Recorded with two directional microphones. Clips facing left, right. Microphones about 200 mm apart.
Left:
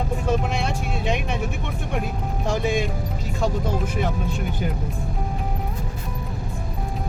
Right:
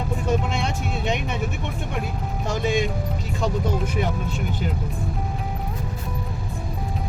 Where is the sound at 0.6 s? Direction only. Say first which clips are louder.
Even; 5° left (ahead or behind).